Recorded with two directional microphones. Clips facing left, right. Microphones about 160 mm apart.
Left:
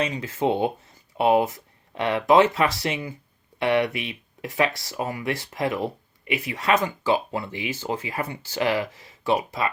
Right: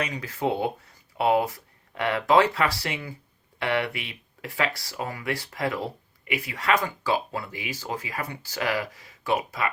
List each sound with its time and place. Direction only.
0.0 s speech: 25° left (ahead or behind)